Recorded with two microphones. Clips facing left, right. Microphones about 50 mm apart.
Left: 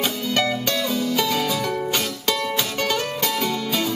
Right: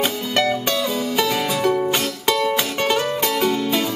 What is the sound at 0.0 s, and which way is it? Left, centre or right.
Music, centre.